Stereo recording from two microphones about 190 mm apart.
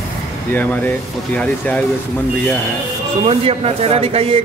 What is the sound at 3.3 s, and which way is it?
Speech, 30° right (ahead or behind).